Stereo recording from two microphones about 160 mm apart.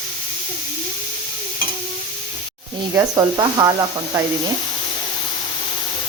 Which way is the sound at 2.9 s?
25° right (ahead or behind).